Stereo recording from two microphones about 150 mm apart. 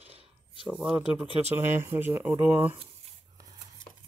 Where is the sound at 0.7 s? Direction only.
5° right (ahead or behind).